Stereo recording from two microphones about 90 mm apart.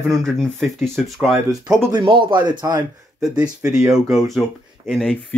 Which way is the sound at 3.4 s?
40° right (ahead or behind).